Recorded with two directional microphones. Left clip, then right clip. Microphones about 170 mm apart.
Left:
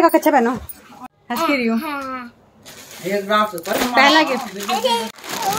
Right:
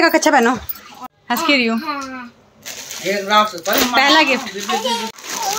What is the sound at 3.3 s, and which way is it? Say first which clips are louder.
Speech: right 4 dB; 60° left (ahead or behind).